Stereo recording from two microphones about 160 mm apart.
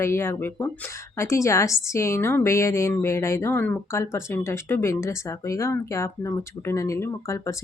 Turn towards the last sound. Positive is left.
turn(degrees=20)  # may be behind; listen again after turning